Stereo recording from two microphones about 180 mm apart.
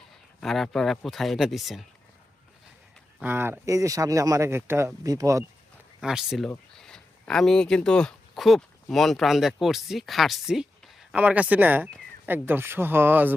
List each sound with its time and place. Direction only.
0.3 s speech: centre (ahead or behind)
3.2 s speech: 10° right (ahead or behind)
6.0 s speech: 5° right (ahead or behind)